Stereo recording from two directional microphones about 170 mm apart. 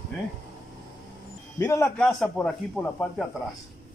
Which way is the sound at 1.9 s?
5° left (ahead or behind).